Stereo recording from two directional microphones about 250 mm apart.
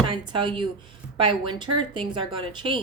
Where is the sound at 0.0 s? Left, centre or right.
Centre.